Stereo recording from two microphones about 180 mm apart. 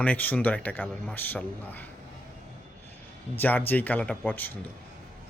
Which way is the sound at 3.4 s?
10° left (ahead or behind).